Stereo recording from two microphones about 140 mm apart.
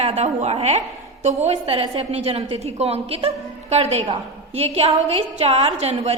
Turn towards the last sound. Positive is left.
turn(degrees=-50)  # may be behind; listen again after turning